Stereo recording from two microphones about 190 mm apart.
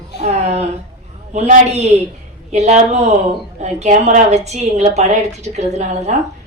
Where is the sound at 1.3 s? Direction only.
35° right (ahead or behind).